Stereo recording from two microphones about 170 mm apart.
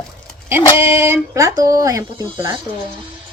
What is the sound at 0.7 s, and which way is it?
Speech, 15° right (ahead or behind).